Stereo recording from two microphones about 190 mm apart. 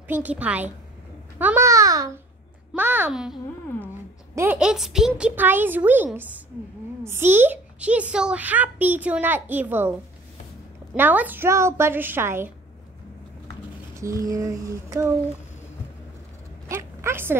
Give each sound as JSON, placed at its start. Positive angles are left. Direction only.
{"t": 0.1, "sound": "a child's voice", "side_deg": -10}
{"t": 4.4, "sound": "a child's voice", "side_deg": -5}
{"t": 11.0, "sound": "a child's voice", "side_deg": -10}
{"t": 13.9, "sound": "a child's voice", "side_deg": -15}
{"t": 16.6, "sound": "a sound", "side_deg": -15}